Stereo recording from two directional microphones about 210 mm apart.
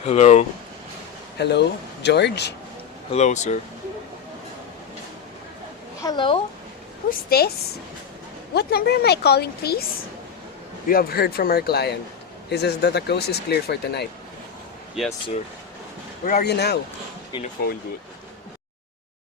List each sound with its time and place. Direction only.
0.0 s speech: 30° left (ahead or behind)
1.4 s speech: 55° left (ahead or behind)
3.1 s speech: 35° left (ahead or behind)
6.0 s a woman's voice: 20° left (ahead or behind)
7.1 s speech: 45° left (ahead or behind)
8.5 s speech: 50° left (ahead or behind)
10.8 s speech: 45° left (ahead or behind)
16.2 s speech: 45° left (ahead or behind)
17.3 s speech: 20° left (ahead or behind)